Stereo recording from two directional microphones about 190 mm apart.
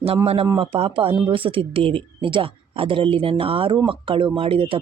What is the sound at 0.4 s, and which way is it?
Speech, 25° right (ahead or behind).